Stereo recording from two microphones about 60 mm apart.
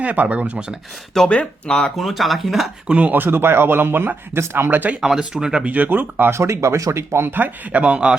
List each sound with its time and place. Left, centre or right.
0.0 s speech: right
1.3 s speech: left
2.0 s speech: centre
2.9 s speech: right
3.2 s speech: right
4.7 s speech: right
4.9 s speech: centre
5.7 s speech: right
6.4 s speech: right
7.3 s speech: right